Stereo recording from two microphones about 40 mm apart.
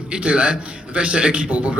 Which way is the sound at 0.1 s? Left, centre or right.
Right.